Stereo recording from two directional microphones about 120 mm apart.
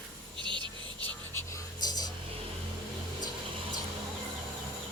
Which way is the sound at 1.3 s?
20° left (ahead or behind).